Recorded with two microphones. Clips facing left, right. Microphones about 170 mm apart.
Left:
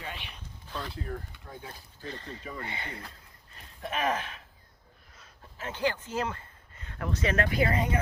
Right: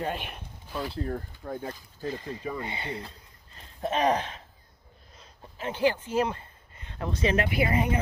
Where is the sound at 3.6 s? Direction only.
30° right (ahead or behind).